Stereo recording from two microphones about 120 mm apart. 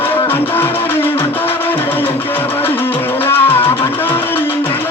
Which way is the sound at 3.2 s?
20° left (ahead or behind).